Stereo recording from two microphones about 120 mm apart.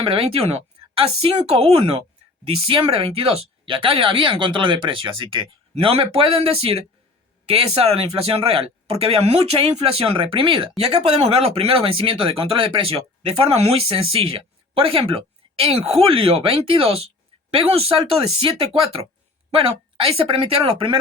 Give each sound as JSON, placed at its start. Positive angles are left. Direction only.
{"t": 0.0, "sound": "speech", "side_deg": -50}